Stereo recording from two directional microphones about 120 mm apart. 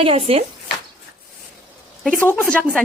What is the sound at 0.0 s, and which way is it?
Speech, 55° right (ahead or behind).